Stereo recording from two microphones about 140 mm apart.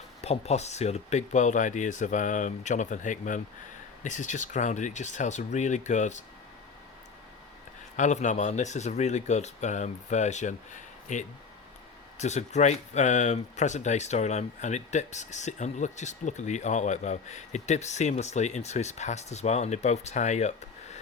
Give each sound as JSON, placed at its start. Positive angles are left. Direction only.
{"t": 0.2, "sound": "speech", "side_deg": 50}
{"t": 7.9, "sound": "speech", "side_deg": 60}